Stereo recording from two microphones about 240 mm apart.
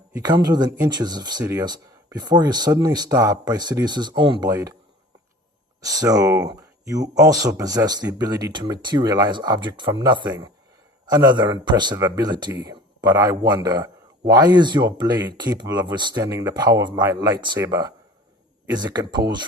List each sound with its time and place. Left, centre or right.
0.1 s speech: centre
5.8 s speech: centre